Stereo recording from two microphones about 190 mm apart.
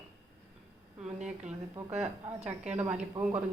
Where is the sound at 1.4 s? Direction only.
5° right (ahead or behind).